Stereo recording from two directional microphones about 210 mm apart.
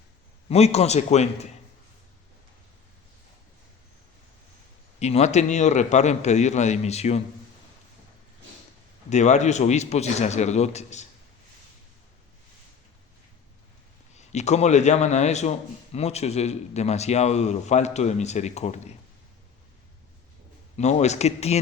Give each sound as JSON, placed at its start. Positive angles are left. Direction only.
{"t": 0.4, "sound": "a man's voice", "side_deg": 30}
{"t": 4.9, "sound": "a man's voice", "side_deg": 30}
{"t": 9.0, "sound": "a man's voice", "side_deg": 35}
{"t": 14.2, "sound": "a man's voice", "side_deg": 30}
{"t": 20.7, "sound": "a man's voice", "side_deg": 30}